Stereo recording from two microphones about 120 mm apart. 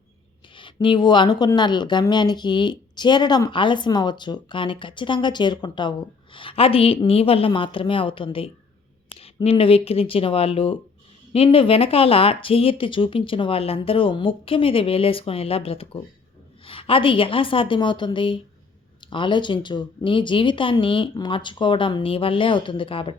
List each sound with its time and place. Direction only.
0.5 s speech: 45° left (ahead or behind)